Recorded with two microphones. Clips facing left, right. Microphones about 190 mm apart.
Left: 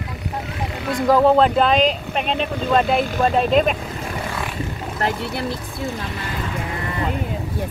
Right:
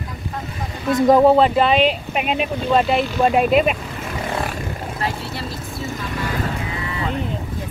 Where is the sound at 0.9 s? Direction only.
20° right (ahead or behind).